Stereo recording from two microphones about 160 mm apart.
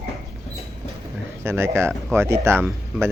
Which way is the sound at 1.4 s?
15° right (ahead or behind).